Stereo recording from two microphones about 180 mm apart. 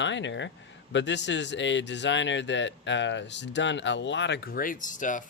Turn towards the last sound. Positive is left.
turn(degrees=45)  # may be behind; listen again after turning